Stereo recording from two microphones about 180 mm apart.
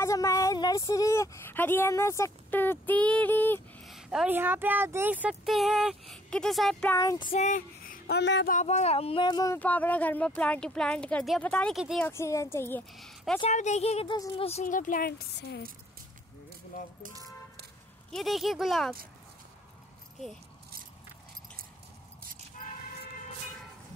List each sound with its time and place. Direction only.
0.0 s speech: 15° left (ahead or behind)
3.8 s speech: centre (ahead or behind)
7.0 s child singing: 20° left (ahead or behind)
7.2 s speech: 45° left (ahead or behind); by 8.5 s 75° left (ahead or behind)
8.5 s speech: 40° left (ahead or behind); by 12.8 s 15° left (ahead or behind)
12.9 s speech: centre (ahead or behind)
13.4 s a woman's voice: 40° left (ahead or behind)
14.1 s child singing: 20° left (ahead or behind)
14.4 s speech: 40° left (ahead or behind); by 15.6 s 60° left (ahead or behind)
18.1 s speech: centre (ahead or behind)